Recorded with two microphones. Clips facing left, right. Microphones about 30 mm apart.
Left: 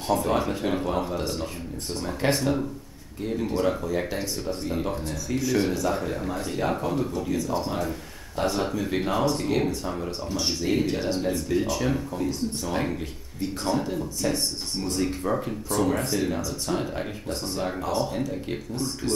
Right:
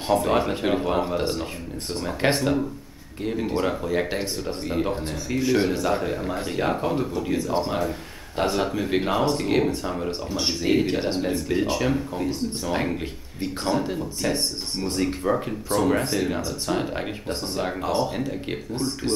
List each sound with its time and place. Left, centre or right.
0.1 s speech: right